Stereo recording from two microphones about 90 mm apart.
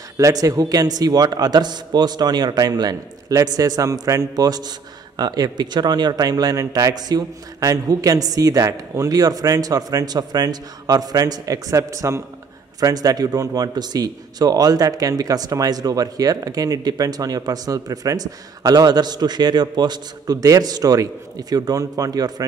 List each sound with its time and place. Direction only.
0.2 s a man's voice: 40° right (ahead or behind)